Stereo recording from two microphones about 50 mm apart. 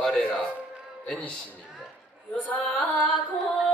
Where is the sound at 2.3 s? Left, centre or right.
Left.